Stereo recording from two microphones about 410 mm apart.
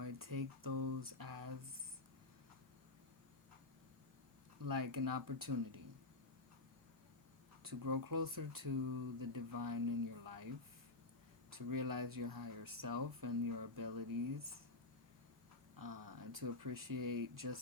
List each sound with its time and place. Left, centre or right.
0.0 s a sound: right
4.6 s speech: right
7.6 s speech: right
11.5 s speech: right
15.8 s speech: right